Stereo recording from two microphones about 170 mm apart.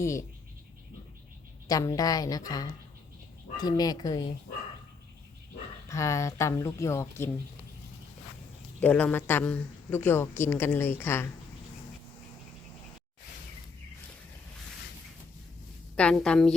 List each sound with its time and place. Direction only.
0.0 s a woman's voice: 15° left (ahead or behind)
1.6 s a woman's voice: 20° left (ahead or behind)
5.9 s a woman's voice: 15° left (ahead or behind)
8.8 s a woman's voice: 10° left (ahead or behind)
16.0 s a woman's voice: 5° left (ahead or behind)